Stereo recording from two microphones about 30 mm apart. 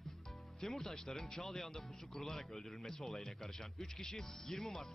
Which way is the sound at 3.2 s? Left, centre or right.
Centre.